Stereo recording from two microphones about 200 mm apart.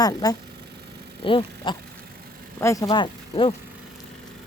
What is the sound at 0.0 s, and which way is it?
Speech, 20° left (ahead or behind).